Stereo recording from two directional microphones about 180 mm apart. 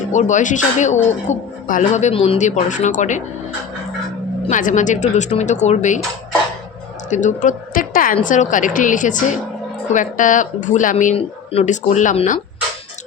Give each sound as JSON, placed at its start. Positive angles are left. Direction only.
{"t": 0.1, "sound": "speech", "side_deg": 45}
{"t": 4.4, "sound": "speech", "side_deg": 45}
{"t": 7.1, "sound": "a woman's voice", "side_deg": 40}